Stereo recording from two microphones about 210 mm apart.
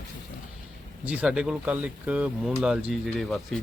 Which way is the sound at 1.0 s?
5° right (ahead or behind).